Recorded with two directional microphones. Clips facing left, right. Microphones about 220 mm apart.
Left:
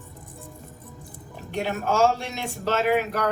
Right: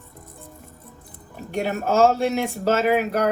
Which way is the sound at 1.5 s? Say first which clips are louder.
Right 3 dB; 40° right (ahead or behind).